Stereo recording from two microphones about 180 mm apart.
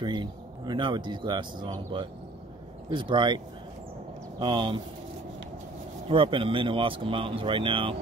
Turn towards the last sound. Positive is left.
turn(degrees=-30)  # may be behind; listen again after turning